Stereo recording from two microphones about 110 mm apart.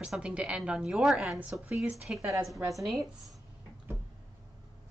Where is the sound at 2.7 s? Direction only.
Centre (ahead or behind).